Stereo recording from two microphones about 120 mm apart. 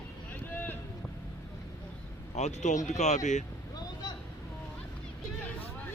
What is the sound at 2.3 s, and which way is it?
Speech, 75° left (ahead or behind).